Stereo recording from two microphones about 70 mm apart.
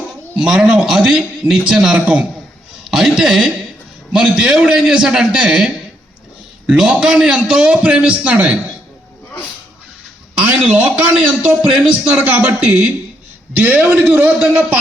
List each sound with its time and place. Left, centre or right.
0.3 s a man's voice: centre
10.7 s a man's voice: right